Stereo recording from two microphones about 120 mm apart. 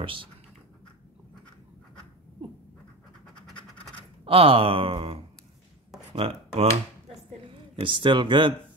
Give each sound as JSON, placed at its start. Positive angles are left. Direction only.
{"t": 0.0, "sound": "speech", "side_deg": -45}
{"t": 4.2, "sound": "speech", "side_deg": -50}
{"t": 7.7, "sound": "speech", "side_deg": -45}